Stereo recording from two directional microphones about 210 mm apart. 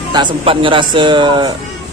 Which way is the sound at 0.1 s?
25° right (ahead or behind).